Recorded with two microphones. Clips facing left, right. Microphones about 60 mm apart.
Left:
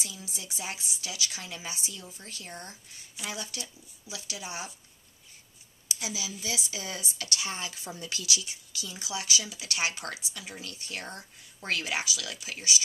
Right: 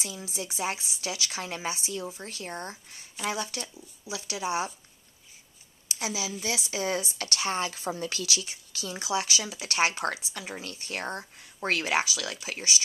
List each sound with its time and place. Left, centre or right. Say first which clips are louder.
0.0 s speech: right 6 dB; right
5.9 s speech: right 4 dB; right